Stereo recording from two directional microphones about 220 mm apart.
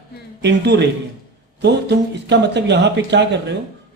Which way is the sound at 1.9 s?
50° right (ahead or behind).